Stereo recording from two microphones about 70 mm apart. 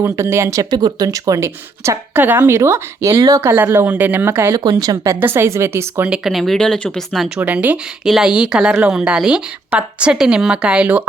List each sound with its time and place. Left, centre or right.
0.0 s speech: right
0.7 s speech: right
2.1 s speech: right
2.5 s a woman's voice: right
3.1 s speech: right
3.4 s a woman's voice: right
4.5 s a woman's voice: right
5.2 s a woman's voice: right
6.1 s speech: centre
7.3 s speech: right
8.0 s speech: centre